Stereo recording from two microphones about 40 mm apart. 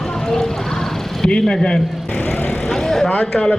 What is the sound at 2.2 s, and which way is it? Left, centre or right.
Vehicle, left.